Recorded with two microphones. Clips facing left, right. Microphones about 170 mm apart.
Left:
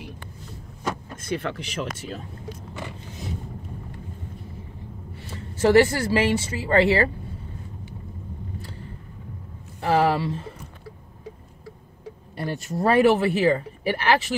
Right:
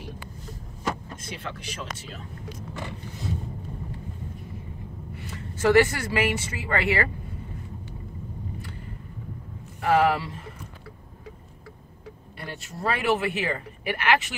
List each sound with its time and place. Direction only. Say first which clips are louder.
1.3 s speech: left 9 dB; 60° left (ahead or behind)
5.1 s speech: even; 30° left (ahead or behind)
9.8 s speech: left 1 dB; 30° left (ahead or behind)
12.4 s speech: left 10 dB; 40° left (ahead or behind)